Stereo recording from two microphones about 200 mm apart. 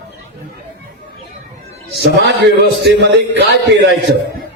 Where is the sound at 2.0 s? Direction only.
60° right (ahead or behind).